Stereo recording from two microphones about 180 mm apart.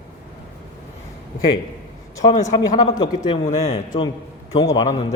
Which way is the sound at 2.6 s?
20° left (ahead or behind).